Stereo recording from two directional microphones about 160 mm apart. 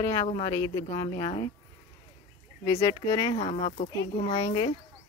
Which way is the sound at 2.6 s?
20° left (ahead or behind).